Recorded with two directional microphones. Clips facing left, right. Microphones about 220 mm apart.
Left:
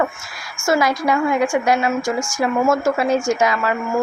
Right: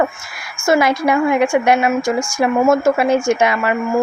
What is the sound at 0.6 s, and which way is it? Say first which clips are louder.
A woman's voice: right 3 dB; 25° right (ahead or behind).